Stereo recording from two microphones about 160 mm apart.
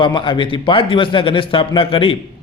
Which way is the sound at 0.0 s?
30° left (ahead or behind).